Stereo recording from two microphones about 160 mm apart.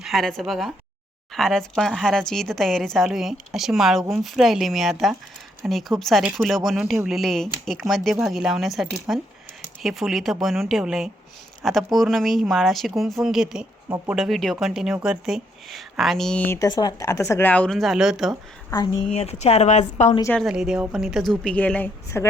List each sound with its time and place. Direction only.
0.0 s speech: centre (ahead or behind)
16.6 s speech: 25° left (ahead or behind); by 18.3 s centre (ahead or behind)
18.7 s speech: 25° left (ahead or behind)
19.1 s speech: 40° left (ahead or behind)
20.4 s speech: centre (ahead or behind); by 22.3 s 15° left (ahead or behind)